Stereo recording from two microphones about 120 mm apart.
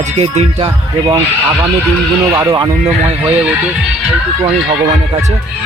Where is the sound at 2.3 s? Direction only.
25° right (ahead or behind).